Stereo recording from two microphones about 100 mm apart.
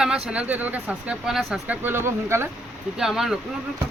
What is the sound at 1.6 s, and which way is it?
Speech, 20° right (ahead or behind).